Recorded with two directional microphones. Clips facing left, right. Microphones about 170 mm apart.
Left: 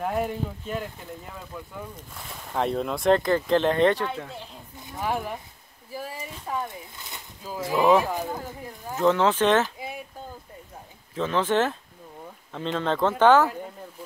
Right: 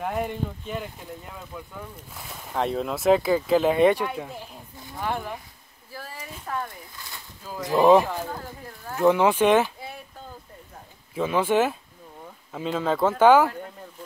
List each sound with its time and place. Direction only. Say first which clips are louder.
0.0 s speech: left 1 dB; centre (ahead or behind)
4.9 s speech: left 1 dB; 10° left (ahead or behind)
5.9 s a sound: left 4 dB; 15° left (ahead or behind)
6.4 s speech: left 1 dB; 10° left (ahead or behind)
7.0 s a sound: left 1 dB; 20° left (ahead or behind)
7.7 s speech: right 3 dB; 15° right (ahead or behind)
8.1 s speech: left 2 dB; 15° left (ahead or behind)
9.0 s speech: right 2 dB; 10° right (ahead or behind)
9.8 s a sound: left 3 dB; 15° left (ahead or behind)
11.1 s speech: right 2 dB; 10° right (ahead or behind)